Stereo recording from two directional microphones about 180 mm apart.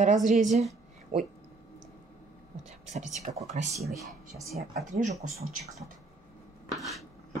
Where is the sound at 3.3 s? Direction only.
35° right (ahead or behind).